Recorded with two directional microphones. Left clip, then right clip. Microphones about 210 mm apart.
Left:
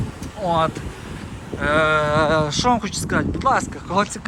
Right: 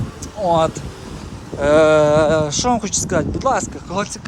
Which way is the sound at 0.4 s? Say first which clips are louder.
Right 4 dB; 20° right (ahead or behind).